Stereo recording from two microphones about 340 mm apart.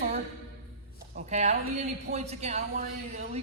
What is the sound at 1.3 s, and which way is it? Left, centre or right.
Speech, centre.